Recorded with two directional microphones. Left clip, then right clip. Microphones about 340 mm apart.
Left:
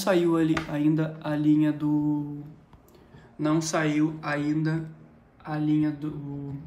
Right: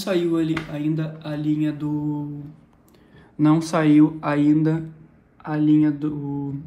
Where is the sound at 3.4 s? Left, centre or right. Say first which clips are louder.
Right 7 dB; centre.